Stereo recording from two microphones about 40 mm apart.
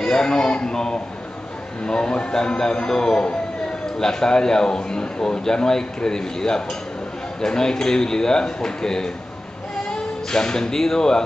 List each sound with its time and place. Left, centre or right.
0.0 s a man's voice: centre